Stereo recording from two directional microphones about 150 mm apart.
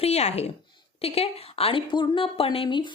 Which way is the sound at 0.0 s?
45° left (ahead or behind).